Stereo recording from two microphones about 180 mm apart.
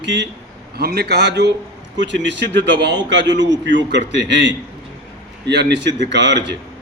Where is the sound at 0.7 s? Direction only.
60° right (ahead or behind).